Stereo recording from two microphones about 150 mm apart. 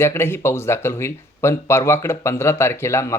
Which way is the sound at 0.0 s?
15° left (ahead or behind).